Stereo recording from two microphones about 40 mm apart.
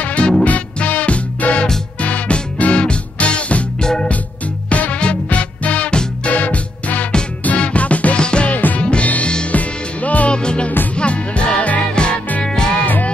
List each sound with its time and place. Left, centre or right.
0.0 s music: left
3.8 s music: centre
4.6 s music: left
8.2 s music: left
8.5 s music: left
8.8 s music: left
10.3 s music: left